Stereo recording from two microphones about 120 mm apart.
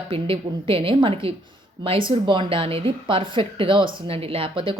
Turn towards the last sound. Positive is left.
turn(degrees=-45)  # may be behind; listen again after turning